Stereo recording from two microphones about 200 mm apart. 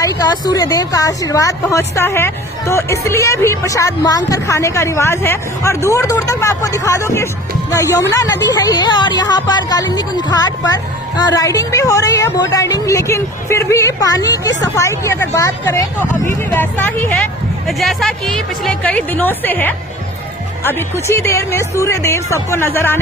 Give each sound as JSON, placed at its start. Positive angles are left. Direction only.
{"t": 0.0, "sound": "speech", "side_deg": 15}